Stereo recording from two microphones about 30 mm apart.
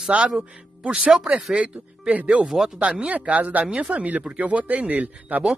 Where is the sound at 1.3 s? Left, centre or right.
Right.